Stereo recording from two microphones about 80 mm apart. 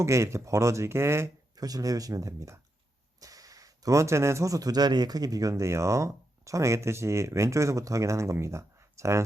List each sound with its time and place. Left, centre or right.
0.0 s speech: right
1.5 s speech: right